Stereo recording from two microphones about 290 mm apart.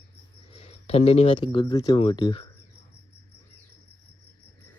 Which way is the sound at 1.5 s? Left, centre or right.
Centre.